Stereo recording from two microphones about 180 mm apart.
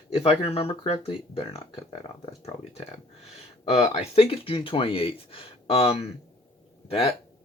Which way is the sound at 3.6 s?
35° left (ahead or behind).